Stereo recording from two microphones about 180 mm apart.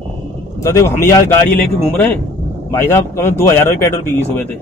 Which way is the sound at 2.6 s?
15° left (ahead or behind).